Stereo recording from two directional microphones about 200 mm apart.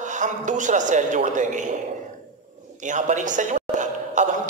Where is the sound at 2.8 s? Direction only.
40° right (ahead or behind).